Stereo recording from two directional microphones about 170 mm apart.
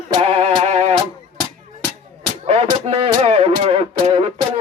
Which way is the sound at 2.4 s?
40° right (ahead or behind).